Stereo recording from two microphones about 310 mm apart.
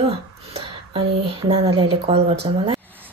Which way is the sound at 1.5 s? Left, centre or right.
Centre.